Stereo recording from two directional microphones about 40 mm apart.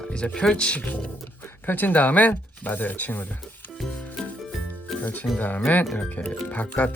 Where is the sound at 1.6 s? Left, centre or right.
Left.